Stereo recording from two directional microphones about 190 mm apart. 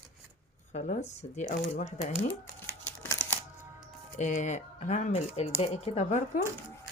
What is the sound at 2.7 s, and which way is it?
Crumpling, 10° left (ahead or behind).